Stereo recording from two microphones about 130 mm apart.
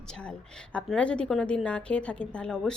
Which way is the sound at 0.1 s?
10° left (ahead or behind).